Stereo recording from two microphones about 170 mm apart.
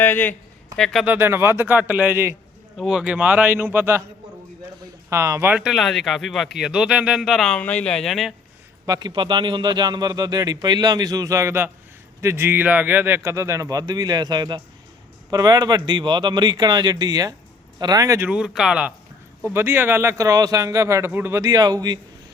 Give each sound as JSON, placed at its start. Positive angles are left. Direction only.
{"t": 0.0, "sound": "a man's voice", "side_deg": 10}
{"t": 2.7, "sound": "speech", "side_deg": 0}
{"t": 5.0, "sound": "speech", "side_deg": -15}
{"t": 8.9, "sound": "speech", "side_deg": -25}
{"t": 18.3, "sound": "speech", "side_deg": -5}